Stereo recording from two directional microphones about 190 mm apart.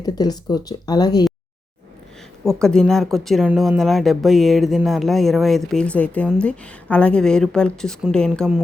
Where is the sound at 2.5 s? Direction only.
5° left (ahead or behind).